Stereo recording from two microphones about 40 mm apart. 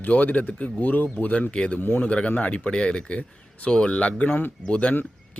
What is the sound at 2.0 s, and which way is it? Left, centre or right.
Speech, left.